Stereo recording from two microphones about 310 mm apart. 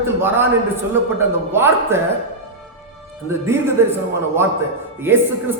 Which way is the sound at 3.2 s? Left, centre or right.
Centre.